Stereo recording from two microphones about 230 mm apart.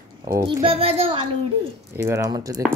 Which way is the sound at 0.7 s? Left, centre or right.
Right.